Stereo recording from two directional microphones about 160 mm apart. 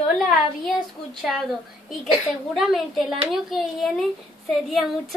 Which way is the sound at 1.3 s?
Centre (ahead or behind).